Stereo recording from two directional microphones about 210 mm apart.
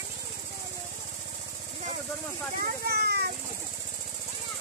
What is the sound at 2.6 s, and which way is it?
Vehicle, 50° right (ahead or behind).